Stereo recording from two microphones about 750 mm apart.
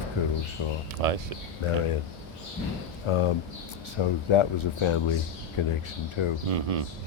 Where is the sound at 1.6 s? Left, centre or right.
Left.